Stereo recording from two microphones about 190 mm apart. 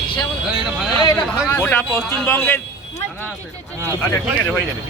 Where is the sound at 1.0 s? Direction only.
15° left (ahead or behind).